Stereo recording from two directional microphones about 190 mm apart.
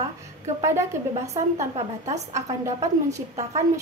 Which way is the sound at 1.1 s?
35° right (ahead or behind).